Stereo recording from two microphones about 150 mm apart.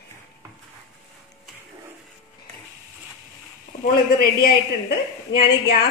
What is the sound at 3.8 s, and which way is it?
A woman's voice, 90° left.